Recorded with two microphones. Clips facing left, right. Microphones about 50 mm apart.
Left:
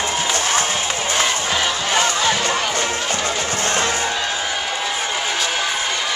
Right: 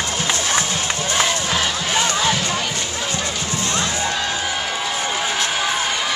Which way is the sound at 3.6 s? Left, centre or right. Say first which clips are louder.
Left 3 dB; left.